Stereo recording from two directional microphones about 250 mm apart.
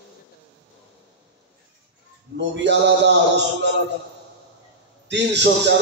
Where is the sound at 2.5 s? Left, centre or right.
Right.